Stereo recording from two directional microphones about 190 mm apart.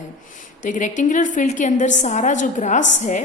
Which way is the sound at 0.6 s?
40° left (ahead or behind).